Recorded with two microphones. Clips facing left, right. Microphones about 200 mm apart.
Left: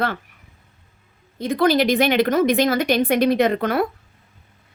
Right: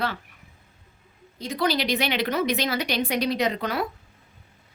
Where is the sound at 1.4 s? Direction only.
55° left (ahead or behind).